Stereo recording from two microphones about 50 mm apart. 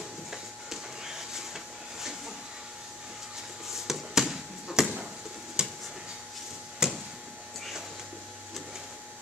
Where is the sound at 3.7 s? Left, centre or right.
Centre.